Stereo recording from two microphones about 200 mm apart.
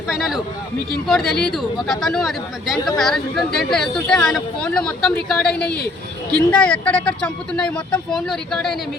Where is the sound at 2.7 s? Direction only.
20° left (ahead or behind).